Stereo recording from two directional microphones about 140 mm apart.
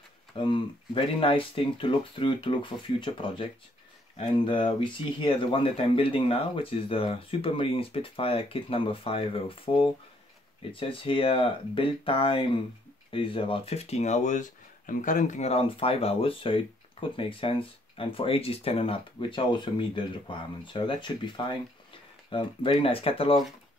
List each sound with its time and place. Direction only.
0.4 s speech: 35° left (ahead or behind)